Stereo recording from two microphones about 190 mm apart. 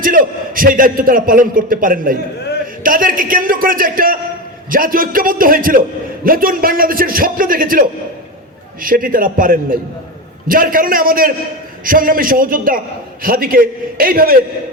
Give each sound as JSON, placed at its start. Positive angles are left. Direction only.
{"t": 0.0, "sound": "a man's voice", "side_deg": -45}